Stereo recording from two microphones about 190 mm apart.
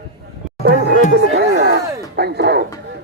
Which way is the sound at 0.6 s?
60° right (ahead or behind).